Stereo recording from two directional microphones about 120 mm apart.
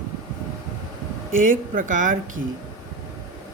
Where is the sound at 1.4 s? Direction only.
90° right.